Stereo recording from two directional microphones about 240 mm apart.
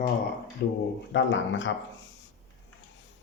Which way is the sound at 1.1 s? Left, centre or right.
Left.